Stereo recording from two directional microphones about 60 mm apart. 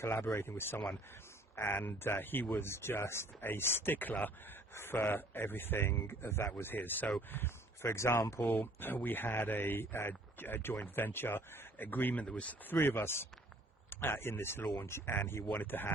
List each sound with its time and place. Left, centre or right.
0.0 s speech: left
4.7 s speech: left
8.6 s speech: left
12.2 s speech: centre
12.7 s speech: left